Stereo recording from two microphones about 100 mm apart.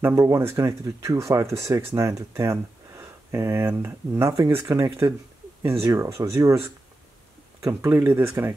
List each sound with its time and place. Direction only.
0.0 s speech: 30° right (ahead or behind)